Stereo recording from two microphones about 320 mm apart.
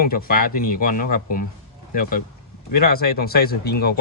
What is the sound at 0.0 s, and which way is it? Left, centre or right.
Speech, left.